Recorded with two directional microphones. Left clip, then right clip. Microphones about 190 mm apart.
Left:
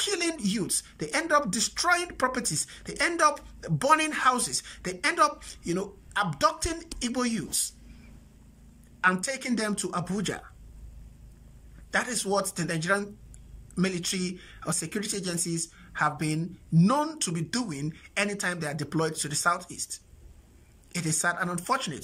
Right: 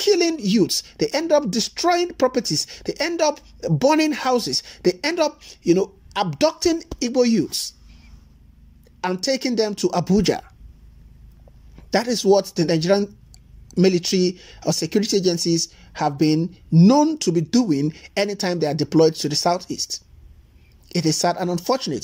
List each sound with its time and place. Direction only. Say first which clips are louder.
0.0 s speech: right 11 dB; 20° right (ahead or behind)
9.0 s speech: right 4 dB; 20° right (ahead or behind)
11.9 s speech: right 10 dB; 25° right (ahead or behind)
20.9 s speech: right 8 dB; 20° right (ahead or behind)